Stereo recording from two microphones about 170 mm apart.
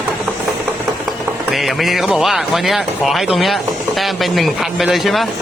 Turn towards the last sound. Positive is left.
turn(degrees=0)  # may be behind; listen again after turning